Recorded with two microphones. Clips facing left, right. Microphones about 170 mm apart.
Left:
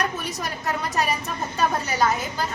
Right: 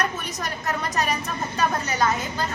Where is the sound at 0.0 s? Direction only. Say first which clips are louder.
Even; 10° left (ahead or behind).